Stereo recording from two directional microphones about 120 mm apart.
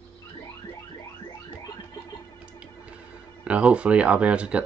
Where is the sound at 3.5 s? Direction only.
10° right (ahead or behind).